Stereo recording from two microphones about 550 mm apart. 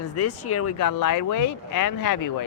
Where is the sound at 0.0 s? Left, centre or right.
Left.